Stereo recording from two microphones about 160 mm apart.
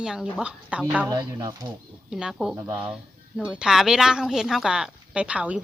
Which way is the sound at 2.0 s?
5° right (ahead or behind).